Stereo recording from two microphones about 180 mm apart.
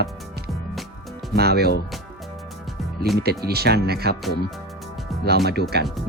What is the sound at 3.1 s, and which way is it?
Speech, centre (ahead or behind).